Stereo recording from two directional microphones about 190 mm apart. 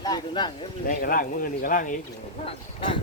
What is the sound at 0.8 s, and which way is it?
Speech, 45° left (ahead or behind).